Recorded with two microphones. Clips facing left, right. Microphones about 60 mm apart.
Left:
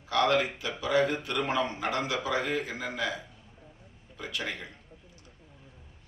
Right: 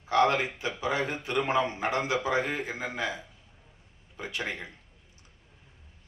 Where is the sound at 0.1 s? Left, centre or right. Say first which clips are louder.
Right 1 dB; right.